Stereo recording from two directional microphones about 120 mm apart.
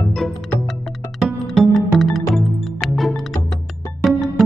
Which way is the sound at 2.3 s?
Centre (ahead or behind).